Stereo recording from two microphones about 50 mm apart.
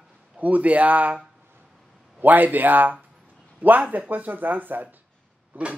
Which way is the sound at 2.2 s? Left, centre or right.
Right.